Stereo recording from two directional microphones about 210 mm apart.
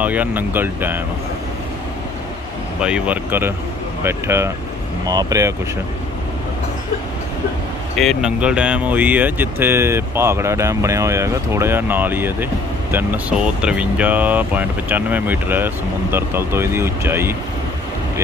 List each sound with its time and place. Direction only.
0.0 s speech: 5° right (ahead or behind)
2.8 s speech: 5° right (ahead or behind)
8.0 s speech: centre (ahead or behind)